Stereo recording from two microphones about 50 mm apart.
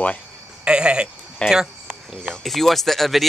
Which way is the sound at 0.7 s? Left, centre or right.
Centre.